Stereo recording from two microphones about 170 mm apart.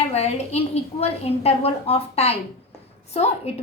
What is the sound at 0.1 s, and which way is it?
A woman's voice, 40° left (ahead or behind).